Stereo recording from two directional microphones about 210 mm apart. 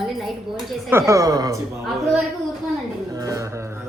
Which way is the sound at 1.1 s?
15° right (ahead or behind).